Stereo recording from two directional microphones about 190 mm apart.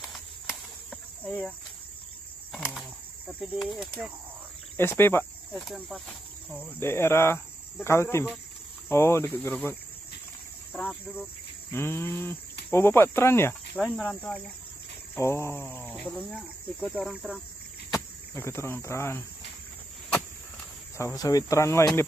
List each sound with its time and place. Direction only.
0.0 s cricket: centre (ahead or behind)
2.5 s a sound: centre (ahead or behind)
3.3 s speech: centre (ahead or behind)
4.7 s speech: 10° left (ahead or behind)
5.5 s speech: centre (ahead or behind)
6.8 s speech: 15° left (ahead or behind)
13.7 s speech: centre (ahead or behind)
18.3 s speech: 15° left (ahead or behind)
21.0 s speech: 20° left (ahead or behind)